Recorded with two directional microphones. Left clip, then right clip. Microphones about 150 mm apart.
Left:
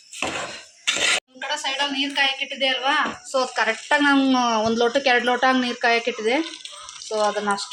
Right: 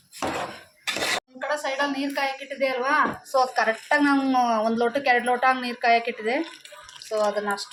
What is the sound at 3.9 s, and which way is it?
Speech, 50° left (ahead or behind).